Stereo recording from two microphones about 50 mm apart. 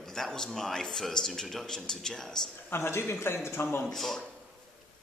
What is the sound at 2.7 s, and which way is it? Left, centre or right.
Speech, left.